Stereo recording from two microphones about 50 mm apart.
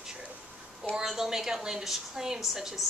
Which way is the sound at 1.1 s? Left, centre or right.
Centre.